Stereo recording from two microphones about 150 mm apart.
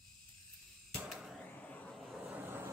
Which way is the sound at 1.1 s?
5° right (ahead or behind).